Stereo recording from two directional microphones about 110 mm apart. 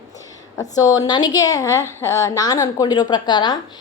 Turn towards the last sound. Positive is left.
turn(degrees=45)  # may be behind; listen again after turning